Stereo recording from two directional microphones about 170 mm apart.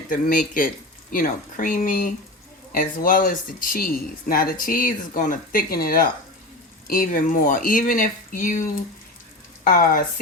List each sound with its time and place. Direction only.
0.1 s speech: 55° left (ahead or behind)
9.6 s speech: 55° left (ahead or behind)